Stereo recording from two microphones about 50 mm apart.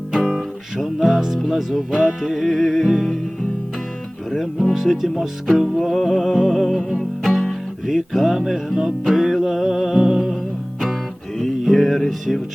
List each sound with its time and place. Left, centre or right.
0.2 s music: centre
4.3 s music: centre
11.3 s music: centre